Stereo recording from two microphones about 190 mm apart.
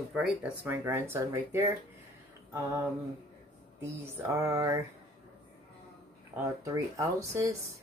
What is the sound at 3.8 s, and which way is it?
Speech, 15° right (ahead or behind).